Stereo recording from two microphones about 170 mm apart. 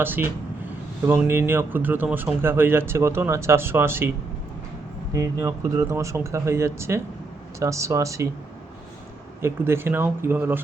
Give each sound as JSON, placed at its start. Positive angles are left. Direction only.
{"t": 0.0, "sound": "speech", "side_deg": -10}
{"t": 5.1, "sound": "speech", "side_deg": -20}
{"t": 9.4, "sound": "speech", "side_deg": -15}